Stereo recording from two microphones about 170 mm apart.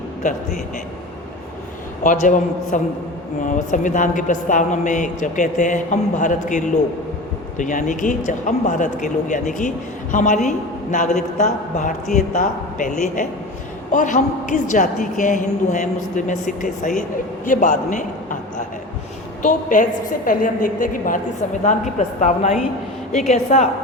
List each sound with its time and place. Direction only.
2.0 s speech: 50° left (ahead or behind)
17.4 s a sound: 50° left (ahead or behind)
19.4 s a woman's voice: 50° left (ahead or behind)